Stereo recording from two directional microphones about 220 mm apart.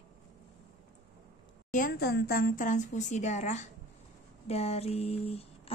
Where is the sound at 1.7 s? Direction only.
40° left (ahead or behind).